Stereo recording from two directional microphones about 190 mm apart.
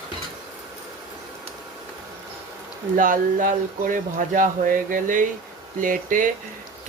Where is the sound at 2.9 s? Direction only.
45° right (ahead or behind).